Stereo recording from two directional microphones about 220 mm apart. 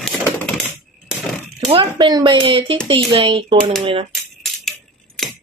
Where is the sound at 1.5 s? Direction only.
20° right (ahead or behind).